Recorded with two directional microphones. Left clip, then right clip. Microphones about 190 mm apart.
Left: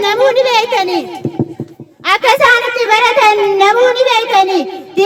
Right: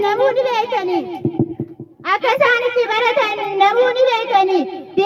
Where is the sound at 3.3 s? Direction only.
50° right (ahead or behind).